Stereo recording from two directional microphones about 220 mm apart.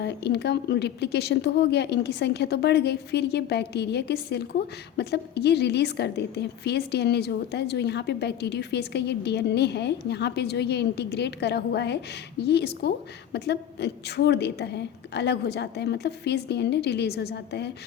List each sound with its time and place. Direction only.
0.0 s speech: 50° left (ahead or behind)